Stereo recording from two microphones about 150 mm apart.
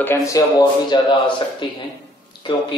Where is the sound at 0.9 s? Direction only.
35° left (ahead or behind).